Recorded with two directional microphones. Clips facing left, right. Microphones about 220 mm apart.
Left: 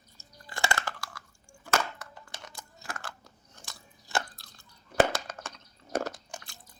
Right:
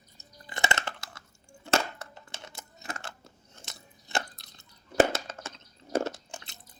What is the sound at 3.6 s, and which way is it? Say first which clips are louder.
Chewing: right 1 dB; 20° right (ahead or behind).